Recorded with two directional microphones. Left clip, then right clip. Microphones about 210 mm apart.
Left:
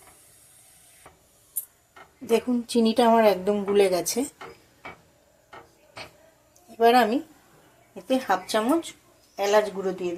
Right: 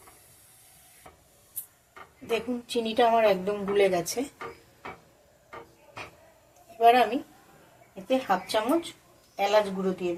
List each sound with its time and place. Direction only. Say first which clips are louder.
2.2 s speech: left 6 dB; 35° left (ahead or behind)
6.7 s a sound: left 1 dB; 35° left (ahead or behind)
8.0 s a woman's voice: left 2 dB; 30° left (ahead or behind)